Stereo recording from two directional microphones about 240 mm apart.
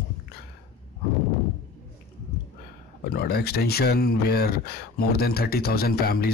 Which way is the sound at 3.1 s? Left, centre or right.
Left.